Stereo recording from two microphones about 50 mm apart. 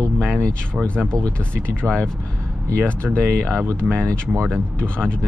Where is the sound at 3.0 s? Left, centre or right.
Centre.